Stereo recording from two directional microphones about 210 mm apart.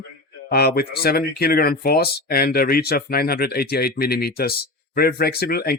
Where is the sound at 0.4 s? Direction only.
45° left (ahead or behind).